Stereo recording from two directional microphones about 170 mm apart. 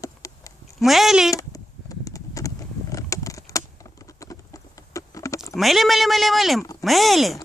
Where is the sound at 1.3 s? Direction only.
20° left (ahead or behind).